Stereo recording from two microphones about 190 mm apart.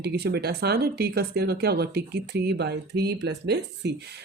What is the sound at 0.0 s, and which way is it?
Speech, 60° right (ahead or behind).